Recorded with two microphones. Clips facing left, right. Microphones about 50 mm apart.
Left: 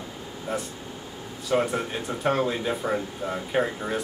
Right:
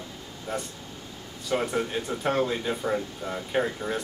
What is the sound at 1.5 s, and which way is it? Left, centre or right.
Speech, centre.